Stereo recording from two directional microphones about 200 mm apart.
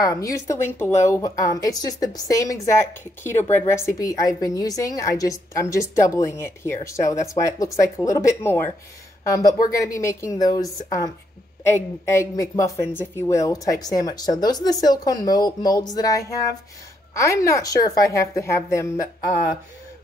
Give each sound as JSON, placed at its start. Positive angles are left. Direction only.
{"t": 0.0, "sound": "speech", "side_deg": 15}